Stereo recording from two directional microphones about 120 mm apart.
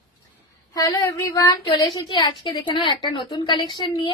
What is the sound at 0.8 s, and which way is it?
A woman's voice, 35° left (ahead or behind).